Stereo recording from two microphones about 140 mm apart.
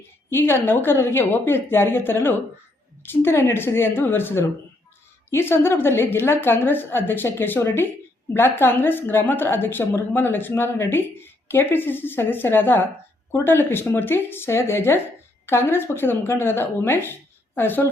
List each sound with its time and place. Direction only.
0.3 s a woman's voice: 15° left (ahead or behind)